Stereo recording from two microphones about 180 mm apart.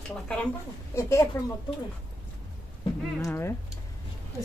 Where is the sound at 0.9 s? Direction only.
15° left (ahead or behind).